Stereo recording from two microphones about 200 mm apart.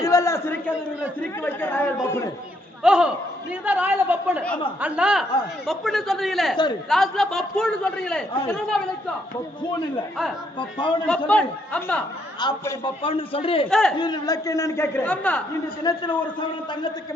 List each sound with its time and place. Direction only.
0.0 s a sound: 15° left (ahead or behind)
1.4 s a man's voice: 10° left (ahead or behind)
2.8 s a man's voice: 5° right (ahead or behind)
10.6 s a man's voice: 25° left (ahead or behind)
11.3 s a man's voice: 5° left (ahead or behind)
12.4 s a man's voice: 20° left (ahead or behind)
13.7 s a man's voice: centre (ahead or behind)
14.0 s a man's voice: 20° left (ahead or behind)
15.8 s a man's voice: 20° left (ahead or behind)